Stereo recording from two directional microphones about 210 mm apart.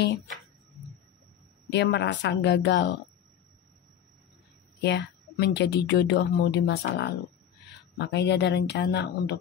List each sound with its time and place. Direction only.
1.7 s speech: 55° left (ahead or behind)
4.8 s a woman's voice: 55° left (ahead or behind)